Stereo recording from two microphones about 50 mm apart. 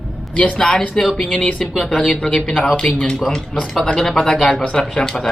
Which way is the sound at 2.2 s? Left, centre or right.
Centre.